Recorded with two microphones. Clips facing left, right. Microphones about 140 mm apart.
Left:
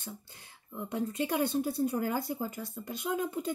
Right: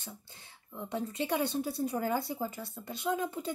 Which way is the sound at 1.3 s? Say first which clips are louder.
Left 3 dB; 50° left (ahead or behind).